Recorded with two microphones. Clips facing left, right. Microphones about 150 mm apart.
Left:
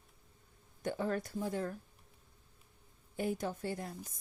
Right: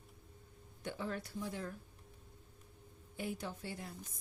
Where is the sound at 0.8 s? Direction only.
45° left (ahead or behind).